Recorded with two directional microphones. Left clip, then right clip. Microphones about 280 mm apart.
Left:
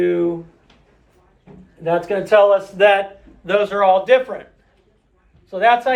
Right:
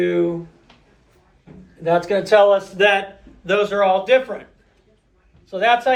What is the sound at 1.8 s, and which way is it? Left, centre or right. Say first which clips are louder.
A man's voice: right 1 dB; centre.